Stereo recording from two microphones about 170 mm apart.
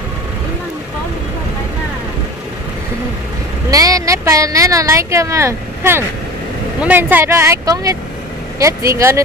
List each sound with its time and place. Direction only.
3.7 s speech: 20° right (ahead or behind)